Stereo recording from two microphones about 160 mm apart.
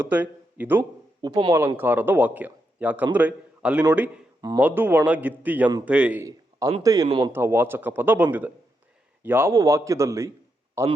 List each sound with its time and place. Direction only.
0.0 s a man's voice: 10° right (ahead or behind)
1.2 s a man's voice: 25° right (ahead or behind)
1.5 s a man's voice: 15° right (ahead or behind)
4.4 s a sound: 25° right (ahead or behind)
4.6 s a man's voice: 10° right (ahead or behind)
6.2 s a sound: 20° right (ahead or behind)
6.8 s a man's voice: 25° right (ahead or behind)
7.3 s a man's voice: 15° right (ahead or behind)